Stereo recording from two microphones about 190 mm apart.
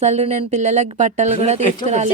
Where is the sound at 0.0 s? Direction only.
35° right (ahead or behind).